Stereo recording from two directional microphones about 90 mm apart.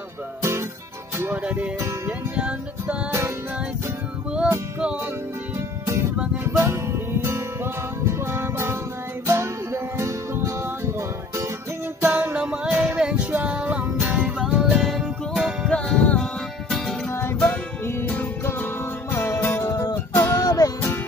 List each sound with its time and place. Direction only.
0.4 s music: 30° right (ahead or behind)
1.4 s music: 15° right (ahead or behind)
3.1 s music: 30° right (ahead or behind)
4.5 s music: 20° right (ahead or behind)
6.4 s music: 30° right (ahead or behind)
12.0 s music: 20° right (ahead or behind)
14.4 s music: 5° right (ahead or behind)
15.7 s music: 10° left (ahead or behind)
17.1 s music: 25° left (ahead or behind)
19.7 s music: 40° left (ahead or behind)